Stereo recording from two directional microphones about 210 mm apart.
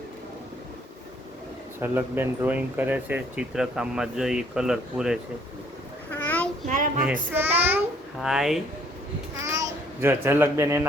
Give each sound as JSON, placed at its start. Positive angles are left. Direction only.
{"t": 1.8, "sound": "speech", "side_deg": -10}
{"t": 6.1, "sound": "a sound", "side_deg": 5}
{"t": 6.7, "sound": "speech", "side_deg": -40}
{"t": 7.0, "sound": "child singing", "side_deg": -10}
{"t": 8.2, "sound": "speech", "side_deg": 0}
{"t": 9.4, "sound": "a child's voice", "side_deg": -15}